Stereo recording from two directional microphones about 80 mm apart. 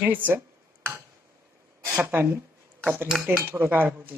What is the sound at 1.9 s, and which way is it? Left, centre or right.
Speech, right.